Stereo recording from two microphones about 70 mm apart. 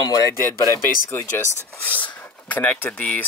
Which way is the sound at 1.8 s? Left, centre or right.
Left.